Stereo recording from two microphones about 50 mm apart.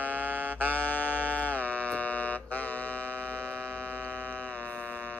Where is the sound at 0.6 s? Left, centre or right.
Left.